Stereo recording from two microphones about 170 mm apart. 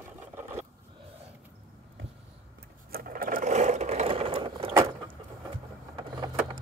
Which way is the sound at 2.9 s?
55° right (ahead or behind).